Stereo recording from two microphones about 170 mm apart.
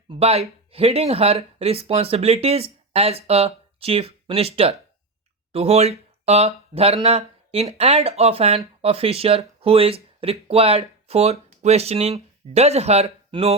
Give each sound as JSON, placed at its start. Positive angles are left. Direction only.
{"t": 0.1, "sound": "speech", "side_deg": -35}